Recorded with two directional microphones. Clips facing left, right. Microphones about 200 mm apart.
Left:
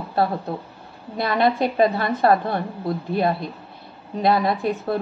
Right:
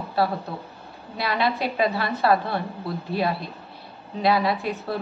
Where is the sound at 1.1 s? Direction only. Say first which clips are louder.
Left 5 dB; 50° left (ahead or behind).